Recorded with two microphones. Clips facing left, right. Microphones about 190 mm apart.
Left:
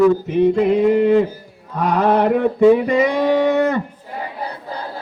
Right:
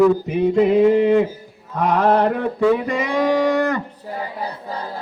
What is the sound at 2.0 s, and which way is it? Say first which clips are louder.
Mantra: left 1 dB; 10° left (ahead or behind).